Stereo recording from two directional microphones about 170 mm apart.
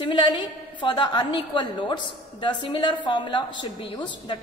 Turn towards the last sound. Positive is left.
turn(degrees=30)  # may be behind; listen again after turning